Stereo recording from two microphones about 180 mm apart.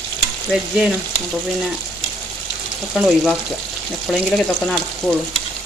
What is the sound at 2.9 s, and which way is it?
Frying, centre (ahead or behind).